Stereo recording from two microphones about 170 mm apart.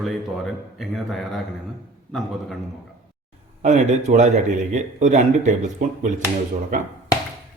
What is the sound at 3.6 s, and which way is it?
A man's voice, 45° right (ahead or behind).